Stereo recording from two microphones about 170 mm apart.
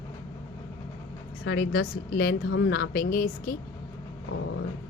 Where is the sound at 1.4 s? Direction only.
60° left (ahead or behind).